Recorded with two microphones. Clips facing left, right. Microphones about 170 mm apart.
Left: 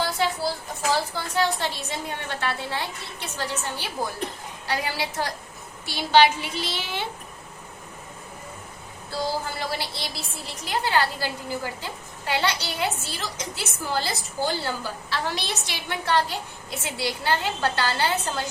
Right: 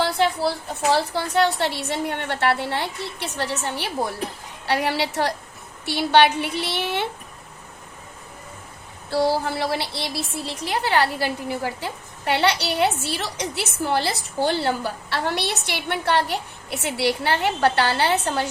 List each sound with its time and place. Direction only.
0.2 s a woman's voice: 65° right (ahead or behind)
9.0 s a woman's voice: 70° right (ahead or behind)